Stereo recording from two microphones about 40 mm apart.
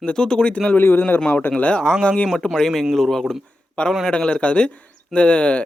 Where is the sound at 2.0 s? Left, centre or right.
Left.